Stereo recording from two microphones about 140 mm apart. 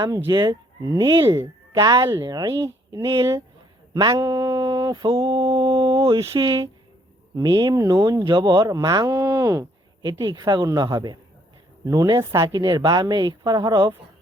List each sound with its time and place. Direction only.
0.3 s speech: 25° right (ahead or behind)
4.5 s mantra: 35° right (ahead or behind)
7.4 s mantra: 30° right (ahead or behind)
7.8 s speech: 25° right (ahead or behind)